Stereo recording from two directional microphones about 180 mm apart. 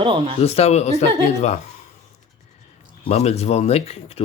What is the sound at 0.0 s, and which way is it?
Speech, 30° right (ahead or behind).